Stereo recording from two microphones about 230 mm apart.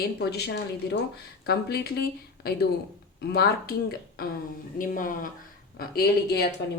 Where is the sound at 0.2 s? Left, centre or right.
Left.